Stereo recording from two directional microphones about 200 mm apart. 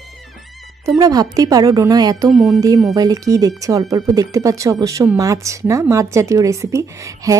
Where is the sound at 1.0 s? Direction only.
20° right (ahead or behind).